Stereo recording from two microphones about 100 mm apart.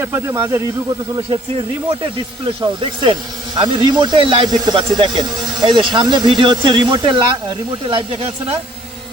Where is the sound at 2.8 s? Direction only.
55° right (ahead or behind).